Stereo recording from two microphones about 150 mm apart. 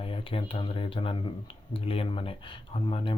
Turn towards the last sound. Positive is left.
turn(degrees=35)  # may be behind; listen again after turning